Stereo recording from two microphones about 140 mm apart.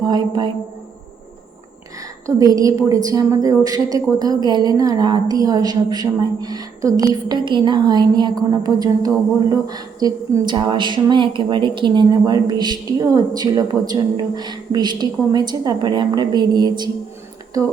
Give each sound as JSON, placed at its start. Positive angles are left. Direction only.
{"t": 0.0, "sound": "a woman's voice", "side_deg": -30}
{"t": 2.2, "sound": "a woman's voice", "side_deg": -25}